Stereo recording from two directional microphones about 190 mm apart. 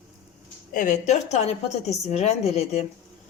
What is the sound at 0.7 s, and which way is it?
A woman's voice, 40° left (ahead or behind).